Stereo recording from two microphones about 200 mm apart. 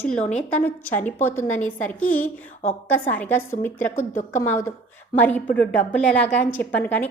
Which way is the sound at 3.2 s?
10° left (ahead or behind).